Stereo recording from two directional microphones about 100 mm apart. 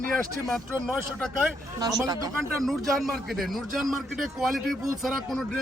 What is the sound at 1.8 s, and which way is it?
Speech, 40° right (ahead or behind).